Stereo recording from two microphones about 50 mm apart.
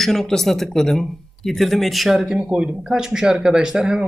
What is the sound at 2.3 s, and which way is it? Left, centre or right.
Speech, centre.